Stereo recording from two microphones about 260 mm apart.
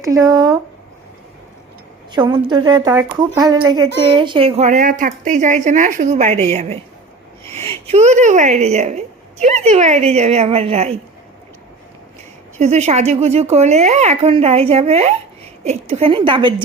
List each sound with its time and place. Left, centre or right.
0.0 s a woman's voice: centre
2.1 s a woman's voice: centre
7.9 s a woman's voice: right
12.5 s a woman's voice: right